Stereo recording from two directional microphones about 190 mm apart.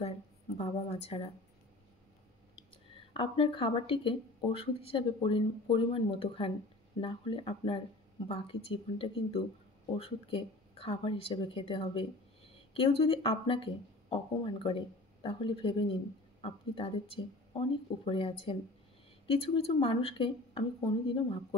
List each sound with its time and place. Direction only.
0.6 s a woman's voice: 35° left (ahead or behind)
3.1 s speech: 30° left (ahead or behind)